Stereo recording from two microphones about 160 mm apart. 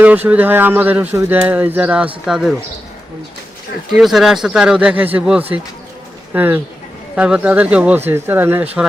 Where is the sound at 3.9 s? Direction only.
Centre (ahead or behind).